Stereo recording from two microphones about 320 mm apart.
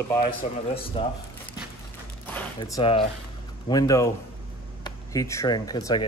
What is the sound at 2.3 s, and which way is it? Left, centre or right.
Speech, centre.